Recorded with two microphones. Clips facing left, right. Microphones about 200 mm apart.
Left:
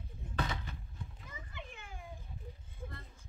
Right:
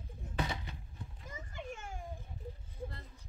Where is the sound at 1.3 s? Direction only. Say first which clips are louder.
Right 9 dB; 45° right (ahead or behind).